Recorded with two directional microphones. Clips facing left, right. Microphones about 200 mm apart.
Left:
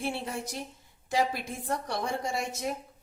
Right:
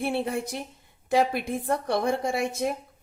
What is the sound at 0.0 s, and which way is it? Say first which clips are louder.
Speech: right 6 dB; 55° right (ahead or behind).